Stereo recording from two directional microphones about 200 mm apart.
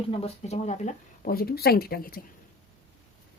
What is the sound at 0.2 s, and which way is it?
Speech, 30° left (ahead or behind).